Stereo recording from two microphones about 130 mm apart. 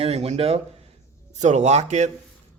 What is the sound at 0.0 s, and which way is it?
Speech, 55° right (ahead or behind).